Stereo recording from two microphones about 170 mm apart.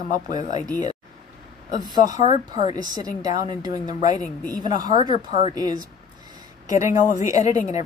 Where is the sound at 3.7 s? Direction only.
50° left (ahead or behind).